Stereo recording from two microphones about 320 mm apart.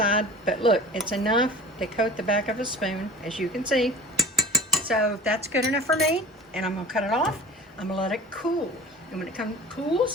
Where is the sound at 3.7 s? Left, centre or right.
Centre.